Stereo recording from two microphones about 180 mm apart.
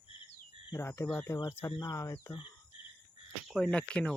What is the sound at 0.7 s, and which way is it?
Speech, 15° left (ahead or behind).